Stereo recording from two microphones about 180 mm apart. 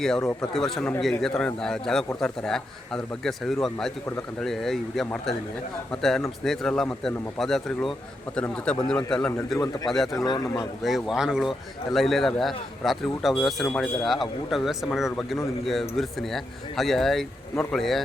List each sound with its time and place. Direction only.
0.5 s speech: centre (ahead or behind)
10.2 s speech: 20° left (ahead or behind)
10.8 s speech: centre (ahead or behind)